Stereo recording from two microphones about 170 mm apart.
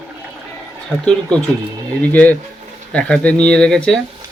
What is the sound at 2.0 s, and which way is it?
Speech, 10° left (ahead or behind).